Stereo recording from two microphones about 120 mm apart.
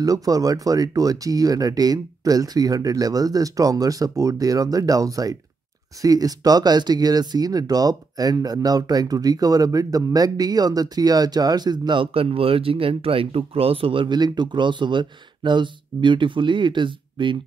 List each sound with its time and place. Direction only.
0.0 s speech: 30° right (ahead or behind)